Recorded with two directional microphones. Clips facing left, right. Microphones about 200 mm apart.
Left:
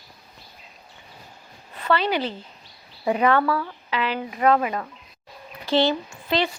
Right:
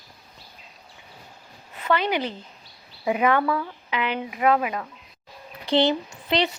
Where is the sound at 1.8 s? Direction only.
15° right (ahead or behind).